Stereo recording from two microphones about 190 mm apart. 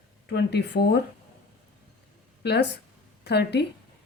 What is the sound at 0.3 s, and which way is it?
Speech, 60° left (ahead or behind).